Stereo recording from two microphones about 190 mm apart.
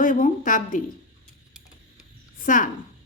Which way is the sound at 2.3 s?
45° left (ahead or behind).